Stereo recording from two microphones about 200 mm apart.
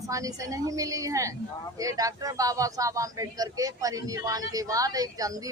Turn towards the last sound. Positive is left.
turn(degrees=-20)  # may be behind; listen again after turning